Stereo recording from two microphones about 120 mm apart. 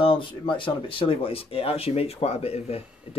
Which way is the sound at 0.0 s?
45° left (ahead or behind).